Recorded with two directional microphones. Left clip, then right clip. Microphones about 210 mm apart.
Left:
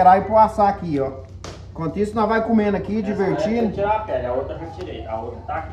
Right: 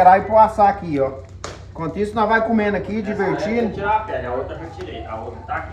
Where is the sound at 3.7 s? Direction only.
30° left (ahead or behind).